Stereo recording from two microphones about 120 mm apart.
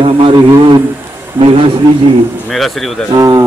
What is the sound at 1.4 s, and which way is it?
Speech, 50° right (ahead or behind).